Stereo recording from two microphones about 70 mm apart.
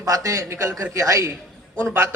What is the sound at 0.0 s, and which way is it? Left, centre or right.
Speech, right.